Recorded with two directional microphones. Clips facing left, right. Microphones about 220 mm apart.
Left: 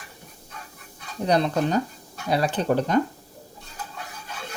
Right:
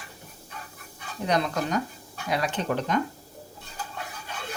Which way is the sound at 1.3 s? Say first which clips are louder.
Left 4 dB; 30° left (ahead or behind).